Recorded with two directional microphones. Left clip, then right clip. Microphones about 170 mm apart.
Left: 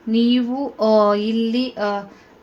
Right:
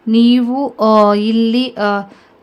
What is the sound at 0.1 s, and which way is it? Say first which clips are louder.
Speech: right 6 dB; 40° right (ahead or behind).